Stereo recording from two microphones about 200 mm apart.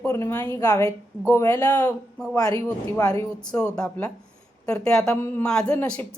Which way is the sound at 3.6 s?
5° left (ahead or behind).